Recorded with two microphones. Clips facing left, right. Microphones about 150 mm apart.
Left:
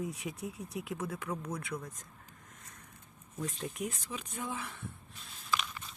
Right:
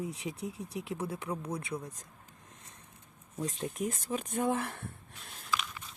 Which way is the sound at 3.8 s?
45° right (ahead or behind).